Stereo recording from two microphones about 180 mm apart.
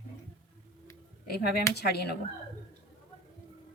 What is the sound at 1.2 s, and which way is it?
Speech, 60° left (ahead or behind).